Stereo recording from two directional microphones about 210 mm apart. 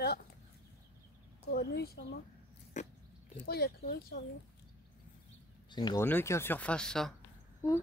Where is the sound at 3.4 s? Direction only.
50° left (ahead or behind).